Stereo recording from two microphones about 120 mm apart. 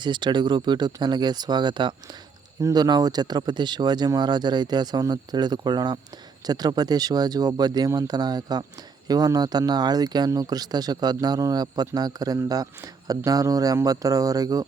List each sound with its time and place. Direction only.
0.0 s speech: 40° right (ahead or behind)
2.6 s speech: 30° right (ahead or behind)